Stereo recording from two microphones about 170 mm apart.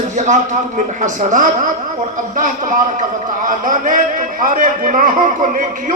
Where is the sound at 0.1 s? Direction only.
45° right (ahead or behind).